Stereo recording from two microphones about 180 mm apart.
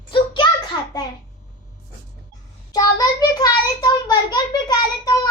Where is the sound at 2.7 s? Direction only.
20° left (ahead or behind).